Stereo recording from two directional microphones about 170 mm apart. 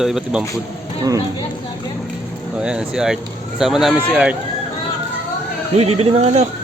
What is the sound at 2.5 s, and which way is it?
Speech, 5° right (ahead or behind).